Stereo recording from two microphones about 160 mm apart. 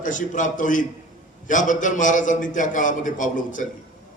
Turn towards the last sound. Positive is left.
turn(degrees=55)  # may be behind; listen again after turning